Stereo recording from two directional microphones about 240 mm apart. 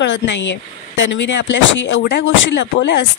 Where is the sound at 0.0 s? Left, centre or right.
Left.